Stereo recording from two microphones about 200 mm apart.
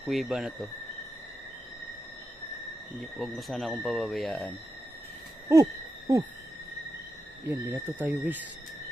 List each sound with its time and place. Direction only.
0.1 s speech: centre (ahead or behind)
3.2 s speech: centre (ahead or behind)
5.5 s speech: 15° right (ahead or behind)
7.4 s speech: 10° right (ahead or behind)